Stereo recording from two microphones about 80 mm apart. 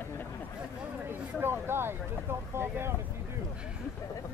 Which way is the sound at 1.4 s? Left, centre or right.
Right.